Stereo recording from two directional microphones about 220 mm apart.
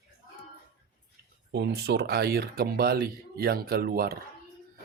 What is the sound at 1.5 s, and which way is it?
Speech, 50° right (ahead or behind).